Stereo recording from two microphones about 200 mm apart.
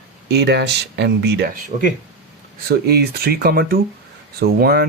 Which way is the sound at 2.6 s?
50° right (ahead or behind).